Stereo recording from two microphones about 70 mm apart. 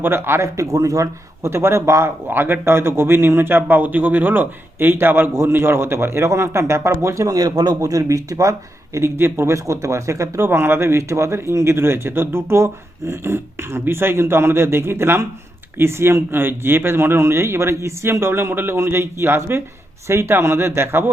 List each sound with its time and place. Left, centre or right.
0.0 s a man's voice: right